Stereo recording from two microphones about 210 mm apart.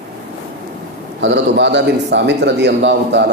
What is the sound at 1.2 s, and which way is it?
A man's voice, 55° right (ahead or behind).